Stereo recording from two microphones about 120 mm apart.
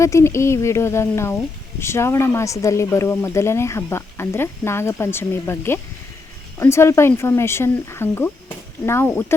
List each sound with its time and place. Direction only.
0.0 s speech: 25° left (ahead or behind)